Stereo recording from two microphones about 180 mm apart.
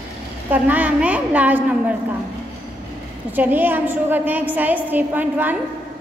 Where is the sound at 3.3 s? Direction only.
10° right (ahead or behind).